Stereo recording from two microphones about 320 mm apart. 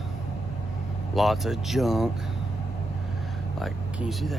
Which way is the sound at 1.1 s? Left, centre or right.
Centre.